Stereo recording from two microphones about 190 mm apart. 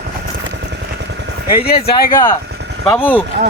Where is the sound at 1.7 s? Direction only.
55° left (ahead or behind).